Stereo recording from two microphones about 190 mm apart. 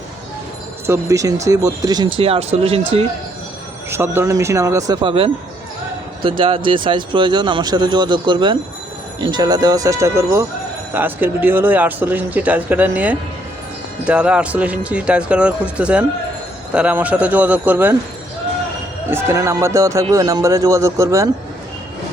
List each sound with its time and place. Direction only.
0.9 s speech: 15° right (ahead or behind)
3.8 s a man's voice: 15° right (ahead or behind)
19.1 s a man's voice: 15° right (ahead or behind)